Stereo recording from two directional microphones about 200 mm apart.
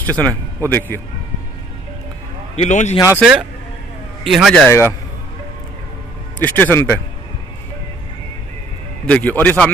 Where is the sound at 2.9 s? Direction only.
15° left (ahead or behind).